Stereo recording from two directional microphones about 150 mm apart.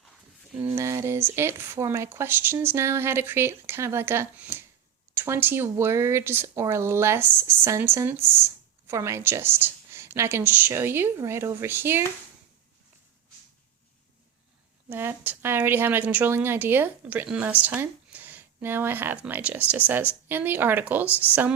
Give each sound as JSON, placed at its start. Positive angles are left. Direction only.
{"t": 0.6, "sound": "speech", "side_deg": -20}
{"t": 14.8, "sound": "speech", "side_deg": -15}